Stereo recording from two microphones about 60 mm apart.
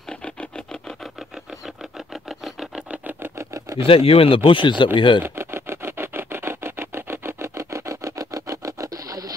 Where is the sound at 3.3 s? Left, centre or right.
Right.